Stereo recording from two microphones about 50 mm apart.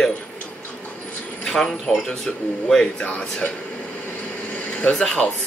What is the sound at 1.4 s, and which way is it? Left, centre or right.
Speech, centre.